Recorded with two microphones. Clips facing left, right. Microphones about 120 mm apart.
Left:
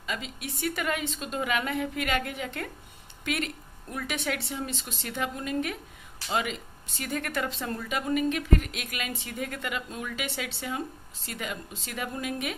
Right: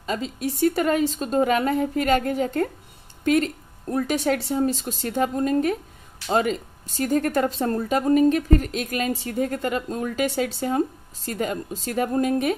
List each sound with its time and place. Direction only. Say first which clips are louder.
0.0 s speech: right 9 dB; 35° right (ahead or behind)